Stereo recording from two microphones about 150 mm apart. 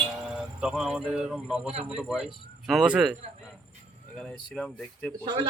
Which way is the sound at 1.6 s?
45° right (ahead or behind).